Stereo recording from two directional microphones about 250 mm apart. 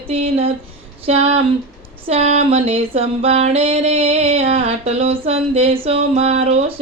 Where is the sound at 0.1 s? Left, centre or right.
Right.